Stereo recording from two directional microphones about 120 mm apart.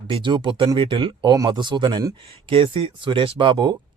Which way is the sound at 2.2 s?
50° right (ahead or behind).